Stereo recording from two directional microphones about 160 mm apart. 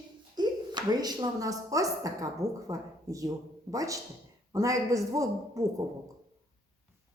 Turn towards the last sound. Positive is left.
turn(degrees=-20)  # may be behind; listen again after turning